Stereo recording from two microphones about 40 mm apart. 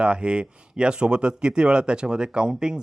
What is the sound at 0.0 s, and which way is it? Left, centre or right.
Speech, right.